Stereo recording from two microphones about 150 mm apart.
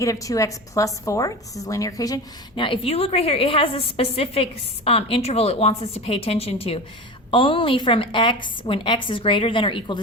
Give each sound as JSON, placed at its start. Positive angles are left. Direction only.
{"t": 0.0, "sound": "a woman's voice", "side_deg": 20}